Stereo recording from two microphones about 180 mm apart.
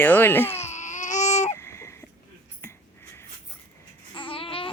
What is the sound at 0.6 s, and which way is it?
Baby cry, 40° left (ahead or behind).